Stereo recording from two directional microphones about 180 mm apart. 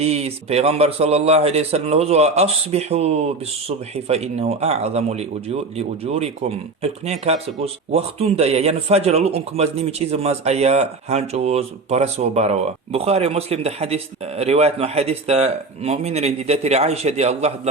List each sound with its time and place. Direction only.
0.0 s speech: 35° right (ahead or behind)